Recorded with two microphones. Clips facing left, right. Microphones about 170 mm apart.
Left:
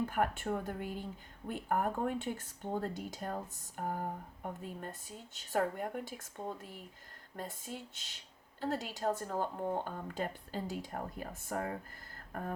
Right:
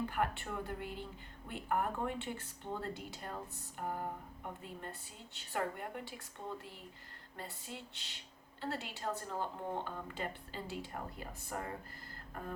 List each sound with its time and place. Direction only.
0.0 s speech: 45° left (ahead or behind)